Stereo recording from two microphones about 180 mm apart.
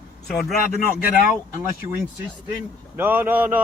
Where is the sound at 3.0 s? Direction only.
10° right (ahead or behind).